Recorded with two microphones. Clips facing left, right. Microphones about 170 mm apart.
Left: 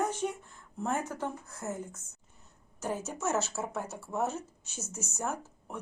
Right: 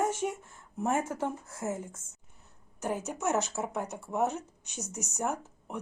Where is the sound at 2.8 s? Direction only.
15° right (ahead or behind).